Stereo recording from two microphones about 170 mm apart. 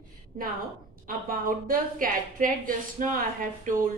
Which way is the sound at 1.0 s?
55° right (ahead or behind).